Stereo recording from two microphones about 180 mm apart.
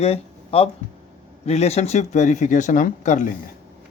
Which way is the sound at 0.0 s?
35° left (ahead or behind).